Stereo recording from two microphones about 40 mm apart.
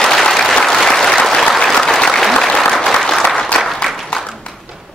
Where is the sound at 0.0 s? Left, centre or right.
Centre.